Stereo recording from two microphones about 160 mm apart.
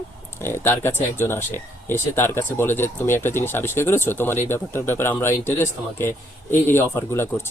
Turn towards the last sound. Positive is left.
turn(degrees=15)  # may be behind; listen again after turning